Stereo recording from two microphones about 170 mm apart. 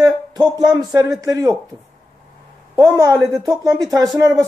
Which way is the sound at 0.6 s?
25° right (ahead or behind).